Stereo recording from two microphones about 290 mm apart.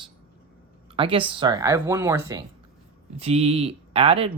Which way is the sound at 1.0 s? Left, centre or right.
Centre.